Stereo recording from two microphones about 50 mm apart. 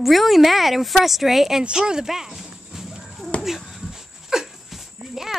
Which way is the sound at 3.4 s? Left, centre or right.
Centre.